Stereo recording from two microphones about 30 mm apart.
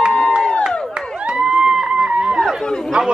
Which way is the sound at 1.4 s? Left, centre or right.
Right.